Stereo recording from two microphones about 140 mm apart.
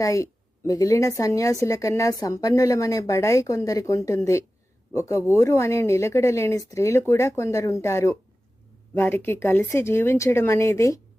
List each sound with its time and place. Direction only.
0.0 s a woman's voice: 25° left (ahead or behind)